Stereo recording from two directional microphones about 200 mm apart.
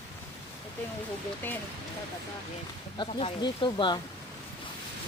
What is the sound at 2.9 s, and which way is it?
Speech, 25° left (ahead or behind).